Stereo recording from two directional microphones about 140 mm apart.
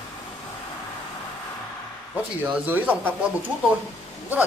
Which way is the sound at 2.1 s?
10° right (ahead or behind).